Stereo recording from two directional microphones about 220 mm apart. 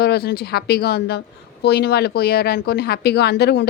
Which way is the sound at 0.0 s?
45° left (ahead or behind).